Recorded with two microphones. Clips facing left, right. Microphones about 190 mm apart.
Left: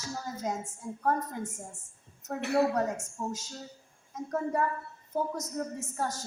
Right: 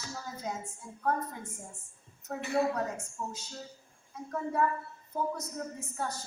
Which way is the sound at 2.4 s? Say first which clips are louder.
Left 3 dB; 70° left (ahead or behind).